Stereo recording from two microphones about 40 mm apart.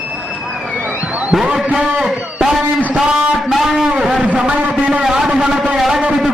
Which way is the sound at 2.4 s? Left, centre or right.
Centre.